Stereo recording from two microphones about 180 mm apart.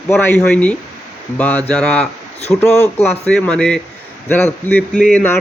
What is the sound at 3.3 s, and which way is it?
Speech, 5° left (ahead or behind).